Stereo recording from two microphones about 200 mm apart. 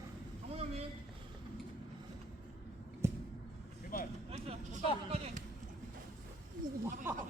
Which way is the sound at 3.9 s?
45° left (ahead or behind).